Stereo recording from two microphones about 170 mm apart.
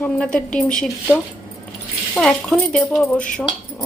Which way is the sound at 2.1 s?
5° left (ahead or behind).